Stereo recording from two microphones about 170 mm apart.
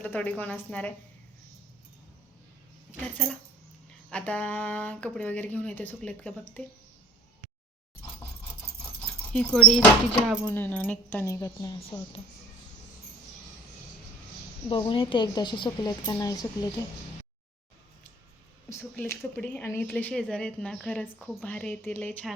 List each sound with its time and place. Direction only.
0.0 s a woman's voice: 10° left (ahead or behind)
4.1 s a woman's voice: 10° left (ahead or behind)
9.6 s a woman's voice: 5° left (ahead or behind); by 11.9 s 30° left (ahead or behind)
14.7 s speech: 30° left (ahead or behind)
18.7 s a woman's voice: 15° left (ahead or behind)